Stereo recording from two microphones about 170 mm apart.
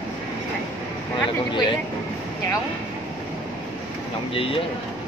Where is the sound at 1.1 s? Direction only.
30° left (ahead or behind).